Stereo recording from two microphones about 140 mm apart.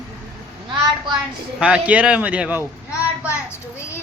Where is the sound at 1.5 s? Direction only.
5° right (ahead or behind).